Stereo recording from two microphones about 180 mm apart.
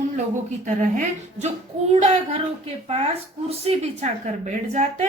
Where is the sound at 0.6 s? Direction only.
45° right (ahead or behind).